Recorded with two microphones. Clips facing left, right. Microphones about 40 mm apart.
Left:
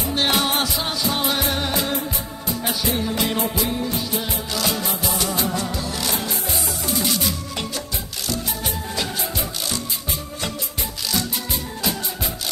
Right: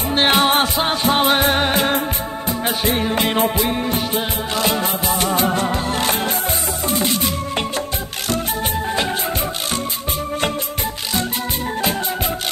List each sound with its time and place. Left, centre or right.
0.1 s music: right